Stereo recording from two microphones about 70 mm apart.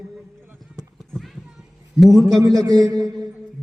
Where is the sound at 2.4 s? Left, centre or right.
Right.